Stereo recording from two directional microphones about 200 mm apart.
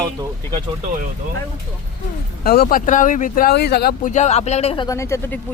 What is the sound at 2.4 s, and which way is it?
Speech, 45° left (ahead or behind).